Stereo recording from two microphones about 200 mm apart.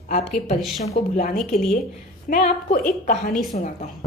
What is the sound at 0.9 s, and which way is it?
A woman's voice, 40° left (ahead or behind).